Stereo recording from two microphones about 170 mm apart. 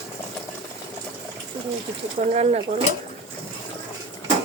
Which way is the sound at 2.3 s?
40° right (ahead or behind).